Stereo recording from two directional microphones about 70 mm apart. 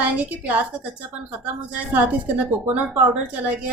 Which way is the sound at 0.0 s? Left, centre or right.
Right.